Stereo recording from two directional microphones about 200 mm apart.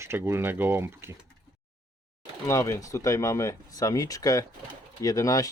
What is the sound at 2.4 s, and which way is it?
Speech, 15° left (ahead or behind).